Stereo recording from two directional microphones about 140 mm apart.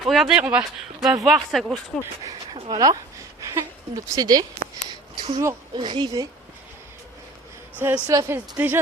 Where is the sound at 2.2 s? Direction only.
25° right (ahead or behind).